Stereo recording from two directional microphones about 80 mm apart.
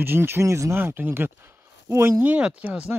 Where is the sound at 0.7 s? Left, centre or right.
Right.